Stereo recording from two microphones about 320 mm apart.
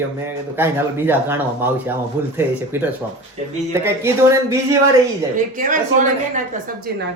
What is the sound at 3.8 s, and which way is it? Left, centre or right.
Speech, centre.